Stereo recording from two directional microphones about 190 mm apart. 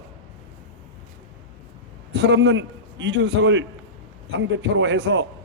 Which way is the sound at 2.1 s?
65° right (ahead or behind).